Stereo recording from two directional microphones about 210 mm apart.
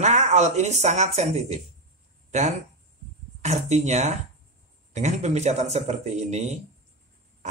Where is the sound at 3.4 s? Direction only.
30° right (ahead or behind).